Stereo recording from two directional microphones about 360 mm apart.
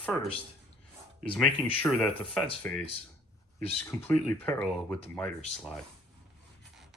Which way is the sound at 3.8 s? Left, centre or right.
Centre.